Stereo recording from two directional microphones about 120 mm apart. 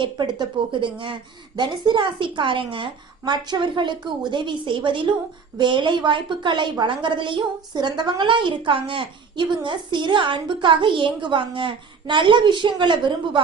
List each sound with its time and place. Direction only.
0.0 s a woman's voice: 40° right (ahead or behind)